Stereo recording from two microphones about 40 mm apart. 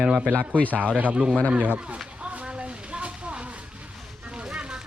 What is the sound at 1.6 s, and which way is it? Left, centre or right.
Speech, right.